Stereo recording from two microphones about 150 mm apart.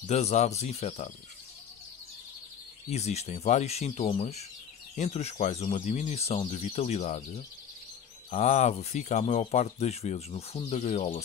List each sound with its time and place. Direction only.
0.0 s speech: 45° left (ahead or behind)
2.9 s speech: 45° left (ahead or behind)